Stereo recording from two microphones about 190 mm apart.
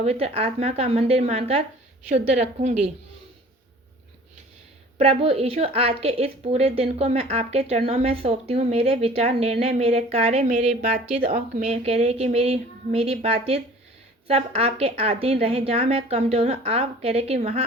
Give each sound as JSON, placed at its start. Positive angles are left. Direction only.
{"t": 0.0, "sound": "speech", "side_deg": -30}
{"t": 4.9, "sound": "speech", "side_deg": -35}